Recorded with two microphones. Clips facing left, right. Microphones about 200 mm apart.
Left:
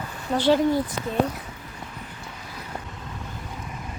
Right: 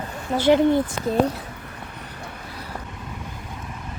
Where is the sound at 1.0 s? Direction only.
35° right (ahead or behind).